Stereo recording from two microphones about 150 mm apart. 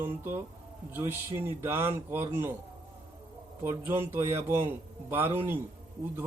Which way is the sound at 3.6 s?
15° right (ahead or behind).